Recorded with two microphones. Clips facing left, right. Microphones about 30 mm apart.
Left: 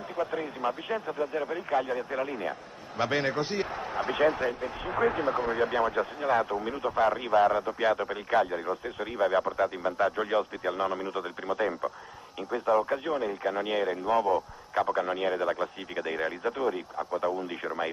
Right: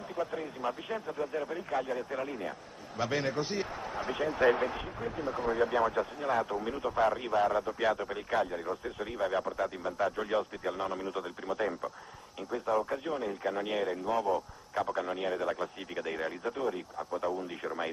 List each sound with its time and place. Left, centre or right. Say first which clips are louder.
0.3 s speech: left 4 dB; left
5.3 s speech: left 2 dB; left